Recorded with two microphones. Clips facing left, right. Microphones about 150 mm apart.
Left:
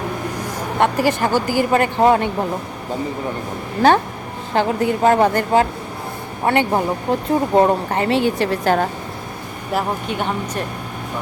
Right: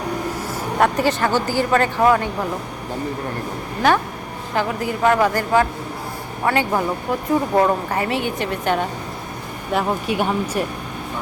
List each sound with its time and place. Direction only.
0.8 s speech: 5° left (ahead or behind); by 2.3 s 25° left (ahead or behind)
4.5 s speech: 30° left (ahead or behind)
9.7 s speech: 5° right (ahead or behind)